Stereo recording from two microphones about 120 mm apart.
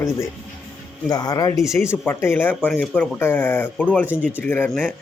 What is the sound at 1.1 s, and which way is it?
Speech, 35° left (ahead or behind).